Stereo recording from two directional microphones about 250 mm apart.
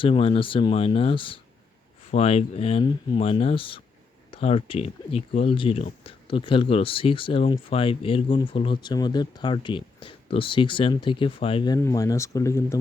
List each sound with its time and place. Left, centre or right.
0.0 s speech: left